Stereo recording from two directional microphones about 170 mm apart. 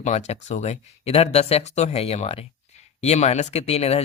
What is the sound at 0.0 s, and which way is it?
Speech, 40° left (ahead or behind).